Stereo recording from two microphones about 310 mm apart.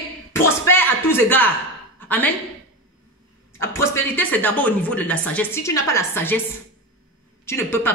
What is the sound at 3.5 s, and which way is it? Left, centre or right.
A woman's voice, centre.